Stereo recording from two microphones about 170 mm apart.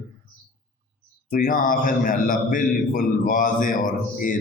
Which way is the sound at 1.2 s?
50° left (ahead or behind).